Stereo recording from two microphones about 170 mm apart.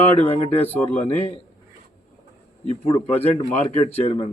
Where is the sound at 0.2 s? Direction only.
35° left (ahead or behind).